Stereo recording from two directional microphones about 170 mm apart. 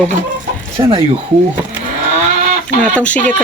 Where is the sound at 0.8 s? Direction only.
20° right (ahead or behind).